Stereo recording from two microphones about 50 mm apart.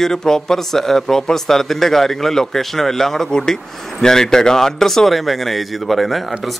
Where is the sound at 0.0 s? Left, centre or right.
Centre.